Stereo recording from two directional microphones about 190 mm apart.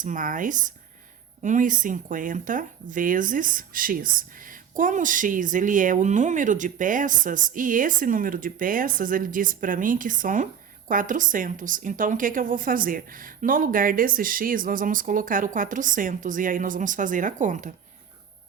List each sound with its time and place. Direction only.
0.0 s speech: 45° right (ahead or behind)